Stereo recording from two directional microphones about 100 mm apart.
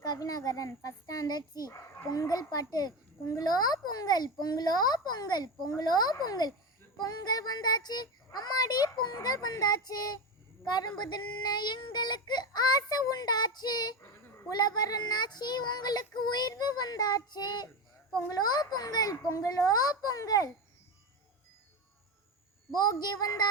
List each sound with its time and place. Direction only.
0.0 s a child's voice: 35° left (ahead or behind)
10.7 s child singing: 45° left (ahead or behind)
18.3 s a child's voice: 40° left (ahead or behind)
22.7 s child singing: 40° left (ahead or behind)